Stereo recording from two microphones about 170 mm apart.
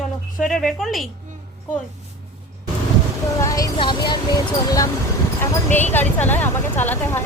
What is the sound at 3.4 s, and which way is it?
Speech, 20° left (ahead or behind).